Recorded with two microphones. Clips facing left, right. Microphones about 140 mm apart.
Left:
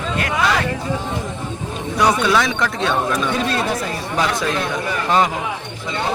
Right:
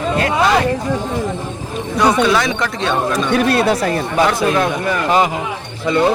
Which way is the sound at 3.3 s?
70° right (ahead or behind).